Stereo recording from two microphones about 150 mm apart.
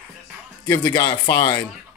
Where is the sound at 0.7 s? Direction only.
30° left (ahead or behind).